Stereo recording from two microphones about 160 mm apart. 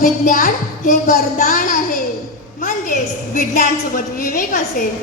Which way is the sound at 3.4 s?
55° left (ahead or behind).